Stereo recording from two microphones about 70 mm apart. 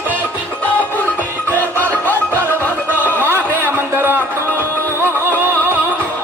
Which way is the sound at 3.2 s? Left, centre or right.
Right.